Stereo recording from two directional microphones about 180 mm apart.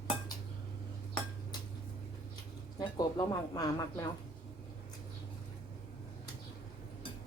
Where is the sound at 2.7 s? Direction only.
25° left (ahead or behind).